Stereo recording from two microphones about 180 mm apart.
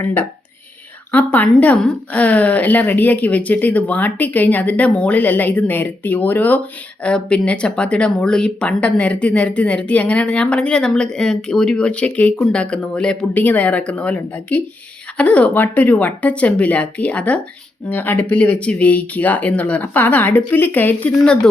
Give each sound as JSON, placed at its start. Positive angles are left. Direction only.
{"t": 0.0, "sound": "speech", "side_deg": 10}